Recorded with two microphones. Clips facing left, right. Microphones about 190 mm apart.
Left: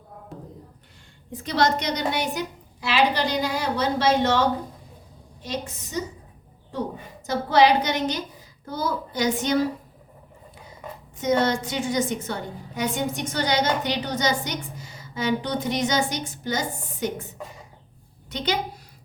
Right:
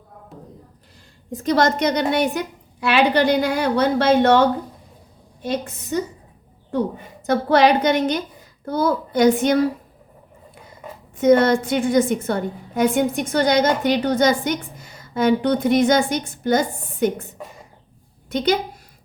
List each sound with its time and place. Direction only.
0.3 s a sound: centre (ahead or behind)
1.3 s a woman's voice: 45° right (ahead or behind)
7.3 s a woman's voice: 55° right (ahead or behind)
11.2 s a woman's voice: 55° right (ahead or behind)
18.3 s a woman's voice: 45° right (ahead or behind)